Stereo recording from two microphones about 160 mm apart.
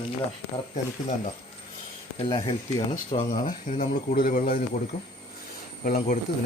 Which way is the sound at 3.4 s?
60° left (ahead or behind).